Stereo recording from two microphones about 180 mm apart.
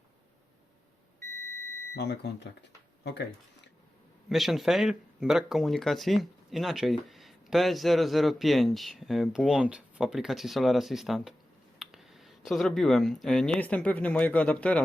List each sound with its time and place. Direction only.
2.0 s speech: 65° left (ahead or behind)
4.3 s speech: centre (ahead or behind)